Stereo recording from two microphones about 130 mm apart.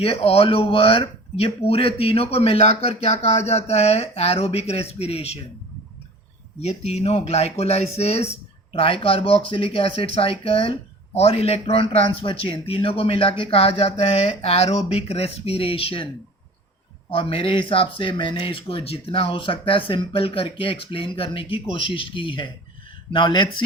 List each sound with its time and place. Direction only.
0.0 s speech: 50° left (ahead or behind)
6.6 s speech: 55° left (ahead or behind)
17.1 s speech: 45° left (ahead or behind)